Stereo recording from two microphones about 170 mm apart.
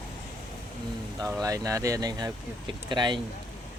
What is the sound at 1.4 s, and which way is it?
Speech, 20° right (ahead or behind).